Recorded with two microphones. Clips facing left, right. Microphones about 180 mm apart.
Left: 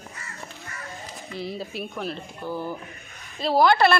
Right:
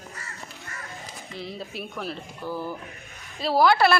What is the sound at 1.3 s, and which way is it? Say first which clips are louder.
Speech: left 3 dB; centre (ahead or behind).